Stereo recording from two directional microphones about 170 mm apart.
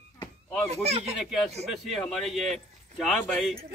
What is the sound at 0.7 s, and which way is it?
Speech, 40° right (ahead or behind).